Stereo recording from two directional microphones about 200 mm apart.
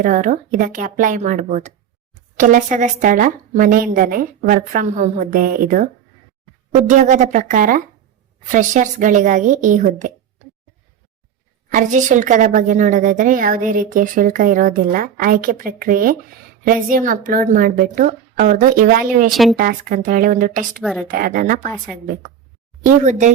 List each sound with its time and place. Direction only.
0.0 s a woman's voice: 40° right (ahead or behind)
11.7 s a woman's voice: 40° right (ahead or behind)
19.3 s speech: centre (ahead or behind)
19.5 s speech: 45° right (ahead or behind)
20.8 s speech: centre (ahead or behind)
21.1 s speech: 45° right (ahead or behind)
23.0 s a woman's voice: 35° right (ahead or behind)